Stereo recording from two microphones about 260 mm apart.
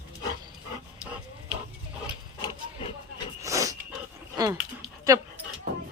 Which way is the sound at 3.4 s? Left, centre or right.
Centre.